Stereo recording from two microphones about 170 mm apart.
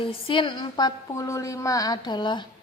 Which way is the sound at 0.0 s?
30° left (ahead or behind).